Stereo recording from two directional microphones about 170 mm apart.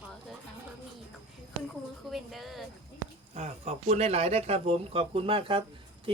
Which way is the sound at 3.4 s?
40° right (ahead or behind).